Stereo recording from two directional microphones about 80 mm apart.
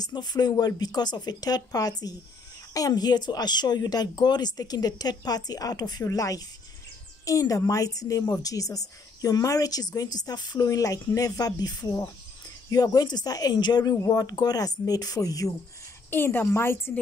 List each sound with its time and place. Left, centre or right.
0.0 s a woman's voice: left
16.1 s speech: left